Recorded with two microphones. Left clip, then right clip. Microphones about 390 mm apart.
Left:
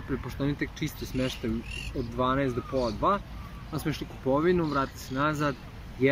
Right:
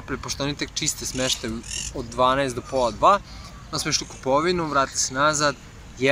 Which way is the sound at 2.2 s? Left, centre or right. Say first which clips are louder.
Right 8 dB; centre.